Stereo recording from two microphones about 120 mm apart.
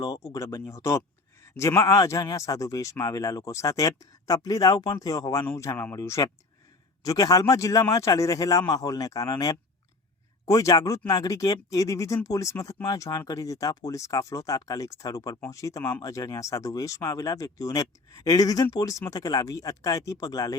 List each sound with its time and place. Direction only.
0.0 s speech: 25° left (ahead or behind)